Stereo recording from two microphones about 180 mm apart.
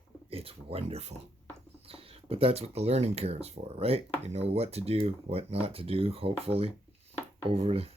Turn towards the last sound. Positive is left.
turn(degrees=-35)  # may be behind; listen again after turning